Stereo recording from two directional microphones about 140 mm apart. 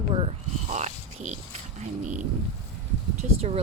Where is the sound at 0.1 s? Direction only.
45° right (ahead or behind).